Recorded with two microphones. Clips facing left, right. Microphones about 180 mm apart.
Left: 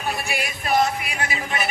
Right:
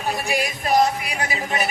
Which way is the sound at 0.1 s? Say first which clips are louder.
Right 4 dB; 40° right (ahead or behind).